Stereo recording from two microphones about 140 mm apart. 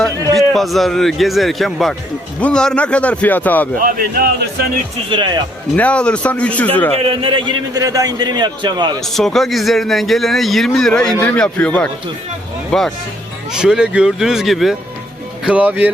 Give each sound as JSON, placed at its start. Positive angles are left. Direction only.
{"t": 0.0, "sound": "a man's voice", "side_deg": 0}
{"t": 3.8, "sound": "speech", "side_deg": -90}
{"t": 5.0, "sound": "a man's voice", "side_deg": -35}
{"t": 5.7, "sound": "speech", "side_deg": 10}
{"t": 7.0, "sound": "a man's voice", "side_deg": -40}
{"t": 9.0, "sound": "a man's voice", "side_deg": 0}